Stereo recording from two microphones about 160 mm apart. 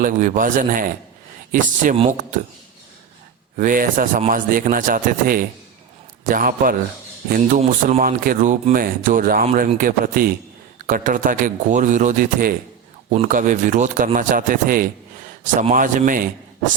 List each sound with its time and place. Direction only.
0.0 s a man's voice: 55° right (ahead or behind)
3.6 s a man's voice: 60° right (ahead or behind)